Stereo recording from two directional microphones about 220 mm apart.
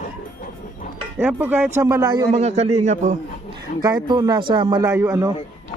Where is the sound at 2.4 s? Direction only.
30° right (ahead or behind).